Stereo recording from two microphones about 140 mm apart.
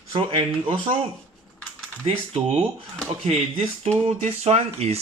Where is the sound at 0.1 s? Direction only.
25° right (ahead or behind).